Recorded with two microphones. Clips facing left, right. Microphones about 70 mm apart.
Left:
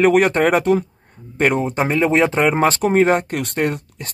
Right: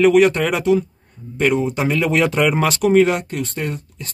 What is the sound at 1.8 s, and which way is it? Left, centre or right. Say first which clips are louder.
Speech: left 2 dB; left.